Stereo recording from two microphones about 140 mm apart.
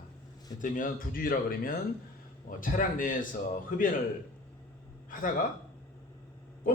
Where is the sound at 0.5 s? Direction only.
70° left (ahead or behind); by 1.7 s 90° left.